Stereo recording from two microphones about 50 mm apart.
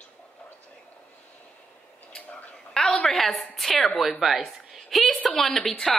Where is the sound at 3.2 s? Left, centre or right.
Centre.